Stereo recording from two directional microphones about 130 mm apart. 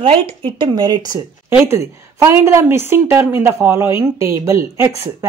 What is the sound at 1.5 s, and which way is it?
A woman's voice, 20° right (ahead or behind).